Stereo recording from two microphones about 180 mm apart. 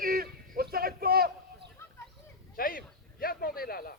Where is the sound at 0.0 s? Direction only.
55° right (ahead or behind).